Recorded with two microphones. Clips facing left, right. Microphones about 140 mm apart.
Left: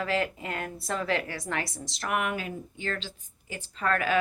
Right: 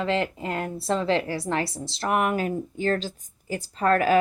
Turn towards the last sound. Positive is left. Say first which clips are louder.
# right 7 dB
turn(degrees=-40)  # may be behind; listen again after turning